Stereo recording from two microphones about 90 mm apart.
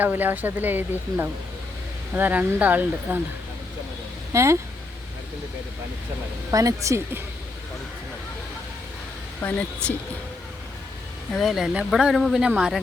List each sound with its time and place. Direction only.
0.0 s speech: 20° right (ahead or behind)
4.3 s speech: 35° right (ahead or behind)
6.5 s speech: 35° right (ahead or behind)
9.4 s speech: 20° left (ahead or behind)
11.3 s speech: centre (ahead or behind)